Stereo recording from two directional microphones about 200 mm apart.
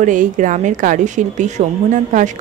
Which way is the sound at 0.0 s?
40° right (ahead or behind).